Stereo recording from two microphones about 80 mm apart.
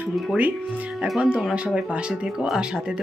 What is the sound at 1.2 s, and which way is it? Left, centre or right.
Speech, centre.